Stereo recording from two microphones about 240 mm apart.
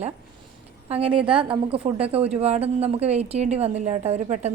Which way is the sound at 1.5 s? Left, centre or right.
Right.